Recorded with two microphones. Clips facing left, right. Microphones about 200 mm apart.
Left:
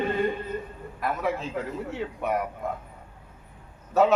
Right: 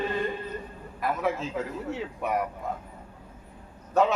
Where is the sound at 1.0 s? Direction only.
Centre (ahead or behind).